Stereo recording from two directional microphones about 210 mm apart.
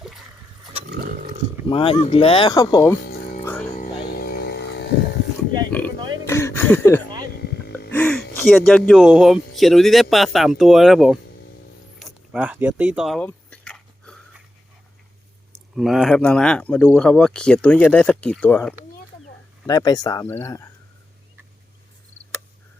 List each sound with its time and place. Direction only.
1.6 s speech: 25° left (ahead or behind)
3.1 s music: 40° left (ahead or behind)
3.4 s music: 10° left (ahead or behind)
3.8 s music: 40° left (ahead or behind)
6.2 s a sound: 10° left (ahead or behind)
7.4 s gasp: 50° left (ahead or behind)
7.9 s a sound: 5° left (ahead or behind)
8.4 s speech: centre (ahead or behind)
11.9 s a sound: centre (ahead or behind)
15.5 s speech: centre (ahead or behind)
19.6 s speech: 20° left (ahead or behind)